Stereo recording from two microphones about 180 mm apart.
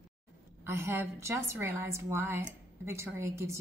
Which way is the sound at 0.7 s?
15° right (ahead or behind).